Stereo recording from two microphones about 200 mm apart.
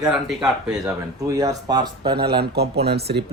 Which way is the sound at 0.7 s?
15° right (ahead or behind).